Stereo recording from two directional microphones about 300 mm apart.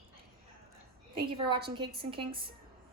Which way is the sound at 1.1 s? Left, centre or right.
Centre.